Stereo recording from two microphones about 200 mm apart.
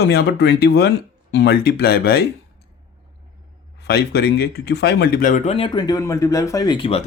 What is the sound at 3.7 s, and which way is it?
Speech, 55° left (ahead or behind).